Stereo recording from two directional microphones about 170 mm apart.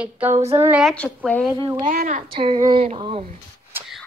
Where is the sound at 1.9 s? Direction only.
50° right (ahead or behind).